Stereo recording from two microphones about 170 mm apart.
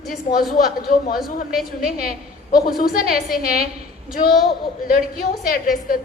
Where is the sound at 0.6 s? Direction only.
65° left (ahead or behind).